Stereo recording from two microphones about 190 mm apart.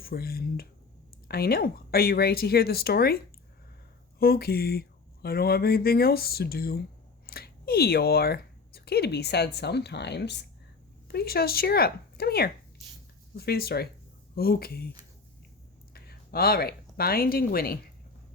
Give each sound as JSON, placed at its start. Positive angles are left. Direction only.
{"t": 0.0, "sound": "speech", "side_deg": 55}
{"t": 4.2, "sound": "speech", "side_deg": 55}
{"t": 15.9, "sound": "speech", "side_deg": 55}